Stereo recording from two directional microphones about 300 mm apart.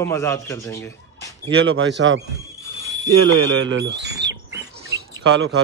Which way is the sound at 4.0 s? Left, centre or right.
Right.